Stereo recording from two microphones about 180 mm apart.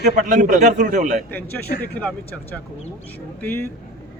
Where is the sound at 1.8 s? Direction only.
10° left (ahead or behind).